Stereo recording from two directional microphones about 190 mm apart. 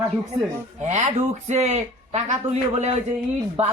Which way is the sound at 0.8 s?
40° right (ahead or behind).